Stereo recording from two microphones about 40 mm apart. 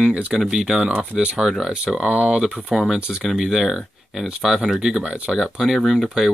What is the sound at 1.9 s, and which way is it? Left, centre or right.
Speech, centre.